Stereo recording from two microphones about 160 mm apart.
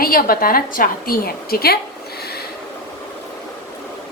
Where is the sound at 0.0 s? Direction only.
65° left (ahead or behind).